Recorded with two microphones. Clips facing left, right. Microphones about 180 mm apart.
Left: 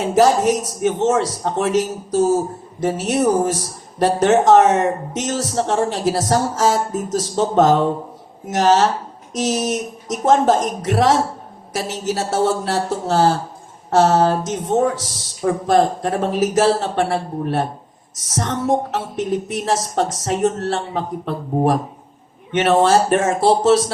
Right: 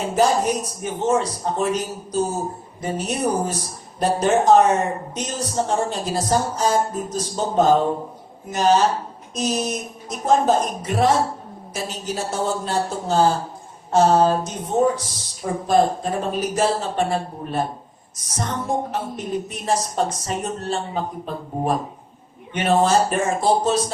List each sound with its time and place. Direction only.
0.1 s a man's voice: 85° left